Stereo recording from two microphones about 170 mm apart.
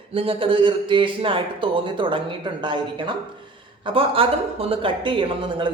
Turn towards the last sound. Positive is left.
turn(degrees=-30)  # may be behind; listen again after turning